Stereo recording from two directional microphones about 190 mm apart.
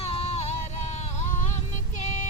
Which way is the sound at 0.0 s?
30° left (ahead or behind).